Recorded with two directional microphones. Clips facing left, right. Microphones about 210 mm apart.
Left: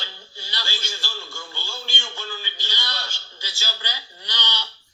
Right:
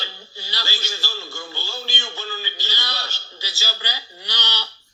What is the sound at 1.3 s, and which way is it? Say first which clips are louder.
Speech: right 4 dB; 35° right (ahead or behind).